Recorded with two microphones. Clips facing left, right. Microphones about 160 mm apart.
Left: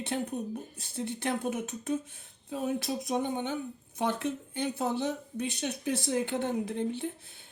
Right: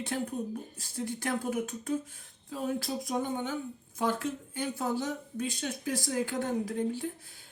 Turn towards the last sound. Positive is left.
turn(degrees=25)  # may be behind; listen again after turning